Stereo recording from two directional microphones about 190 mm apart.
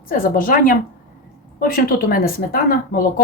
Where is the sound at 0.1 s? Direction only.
50° left (ahead or behind).